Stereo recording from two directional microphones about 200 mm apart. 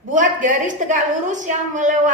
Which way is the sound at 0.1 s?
40° right (ahead or behind).